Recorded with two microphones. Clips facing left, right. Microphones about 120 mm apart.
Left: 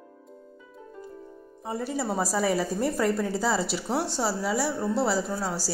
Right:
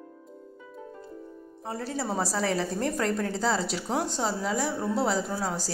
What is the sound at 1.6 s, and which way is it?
A woman's voice, 10° left (ahead or behind).